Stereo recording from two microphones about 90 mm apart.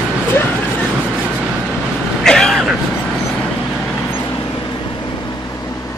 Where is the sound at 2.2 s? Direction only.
5° left (ahead or behind).